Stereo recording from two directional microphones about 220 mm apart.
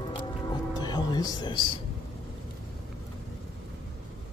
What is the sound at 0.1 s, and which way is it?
Music, 20° left (ahead or behind).